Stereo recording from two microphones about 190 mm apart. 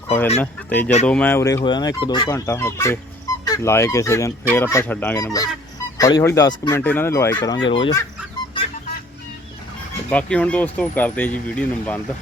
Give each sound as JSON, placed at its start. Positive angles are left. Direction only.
{"t": 0.3, "sound": "speech", "side_deg": 10}
{"t": 10.1, "sound": "speech", "side_deg": 5}